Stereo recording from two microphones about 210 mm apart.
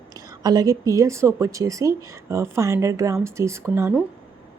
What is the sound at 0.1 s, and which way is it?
A woman's voice, 20° right (ahead or behind).